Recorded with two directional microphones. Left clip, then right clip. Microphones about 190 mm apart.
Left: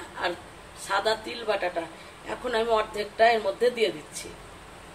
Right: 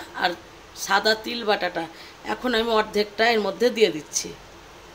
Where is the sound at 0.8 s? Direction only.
60° right (ahead or behind).